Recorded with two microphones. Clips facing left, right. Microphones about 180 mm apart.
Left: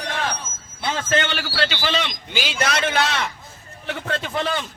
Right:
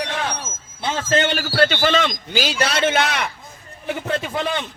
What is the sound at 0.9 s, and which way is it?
Speech, 30° right (ahead or behind).